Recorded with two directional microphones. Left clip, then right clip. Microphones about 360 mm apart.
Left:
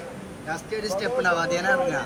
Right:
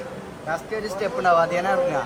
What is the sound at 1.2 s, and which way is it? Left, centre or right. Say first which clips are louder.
Speech: right 6 dB; centre.